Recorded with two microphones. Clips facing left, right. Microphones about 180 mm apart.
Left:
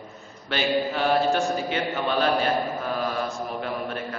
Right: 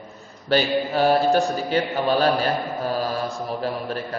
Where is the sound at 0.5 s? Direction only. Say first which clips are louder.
Right 4 dB; 35° right (ahead or behind).